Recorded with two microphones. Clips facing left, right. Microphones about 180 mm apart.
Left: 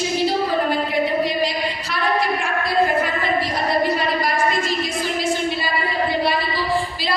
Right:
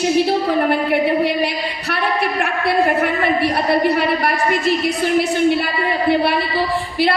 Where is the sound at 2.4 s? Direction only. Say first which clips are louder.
Right 3 dB; 65° right (ahead or behind).